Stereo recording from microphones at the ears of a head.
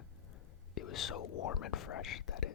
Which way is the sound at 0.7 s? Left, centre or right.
Left.